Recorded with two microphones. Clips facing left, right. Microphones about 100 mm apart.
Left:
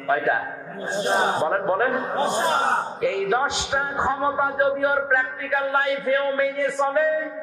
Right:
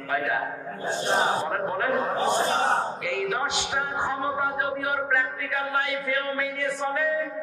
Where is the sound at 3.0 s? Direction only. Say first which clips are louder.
Left 6 dB; 40° left (ahead or behind).